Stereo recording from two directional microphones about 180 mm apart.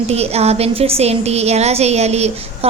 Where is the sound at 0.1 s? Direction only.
35° right (ahead or behind).